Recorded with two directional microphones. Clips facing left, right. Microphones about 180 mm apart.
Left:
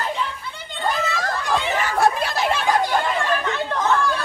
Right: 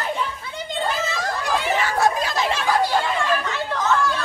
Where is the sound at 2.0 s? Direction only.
60° left (ahead or behind).